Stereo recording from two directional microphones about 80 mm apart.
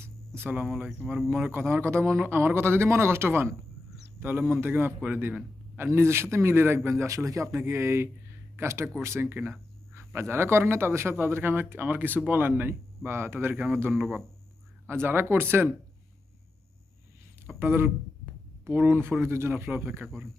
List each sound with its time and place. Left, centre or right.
0.0 s a sound: right
0.7 s speech: centre
1.5 s a man's voice: right
5.7 s a man's voice: right
14.8 s a man's voice: right
17.6 s a man's voice: right